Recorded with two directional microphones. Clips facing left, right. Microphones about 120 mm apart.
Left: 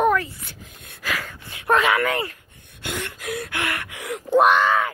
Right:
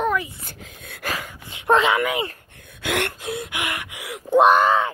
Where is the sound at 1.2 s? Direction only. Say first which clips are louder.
Even; 20° right (ahead or behind).